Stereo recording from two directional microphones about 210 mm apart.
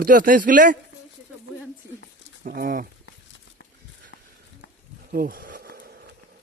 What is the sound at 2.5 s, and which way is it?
Speech, 40° right (ahead or behind).